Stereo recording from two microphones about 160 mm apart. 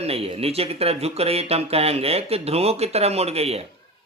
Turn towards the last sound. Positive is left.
turn(degrees=-40)  # may be behind; listen again after turning